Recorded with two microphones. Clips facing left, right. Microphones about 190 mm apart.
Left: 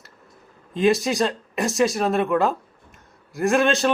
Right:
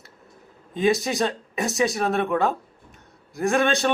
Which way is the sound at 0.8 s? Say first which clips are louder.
Left 2 dB; centre (ahead or behind).